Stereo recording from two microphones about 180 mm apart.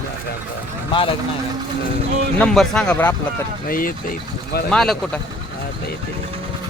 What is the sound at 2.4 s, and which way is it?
Speech, 5° left (ahead or behind).